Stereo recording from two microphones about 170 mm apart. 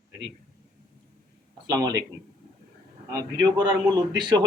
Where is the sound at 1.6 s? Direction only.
20° right (ahead or behind).